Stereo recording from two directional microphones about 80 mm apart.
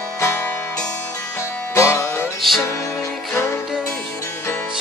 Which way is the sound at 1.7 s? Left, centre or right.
Left.